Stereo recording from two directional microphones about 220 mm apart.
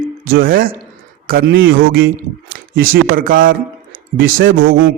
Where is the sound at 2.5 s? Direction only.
45° right (ahead or behind).